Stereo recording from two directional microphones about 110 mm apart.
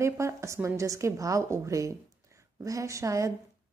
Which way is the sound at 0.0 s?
25° right (ahead or behind).